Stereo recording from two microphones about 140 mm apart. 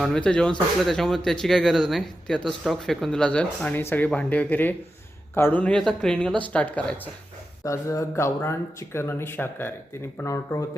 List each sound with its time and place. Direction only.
0.0 s speech: 5° left (ahead or behind)
7.6 s speech: 20° left (ahead or behind)